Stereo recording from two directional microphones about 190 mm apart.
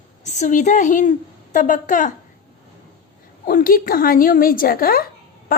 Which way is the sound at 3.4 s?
50° left (ahead or behind).